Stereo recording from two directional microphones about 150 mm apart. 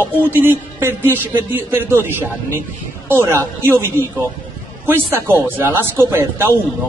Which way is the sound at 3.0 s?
15° right (ahead or behind).